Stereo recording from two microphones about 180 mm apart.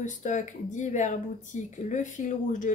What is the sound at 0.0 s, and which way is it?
Speech, 45° left (ahead or behind).